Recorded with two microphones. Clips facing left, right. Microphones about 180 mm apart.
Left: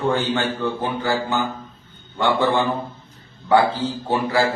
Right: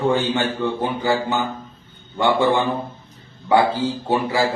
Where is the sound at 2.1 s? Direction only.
15° right (ahead or behind).